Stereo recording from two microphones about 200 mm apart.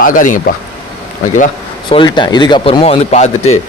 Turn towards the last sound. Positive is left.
turn(degrees=35)  # may be behind; listen again after turning